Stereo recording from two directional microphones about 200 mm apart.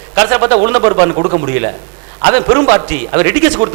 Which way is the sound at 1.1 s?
30° right (ahead or behind).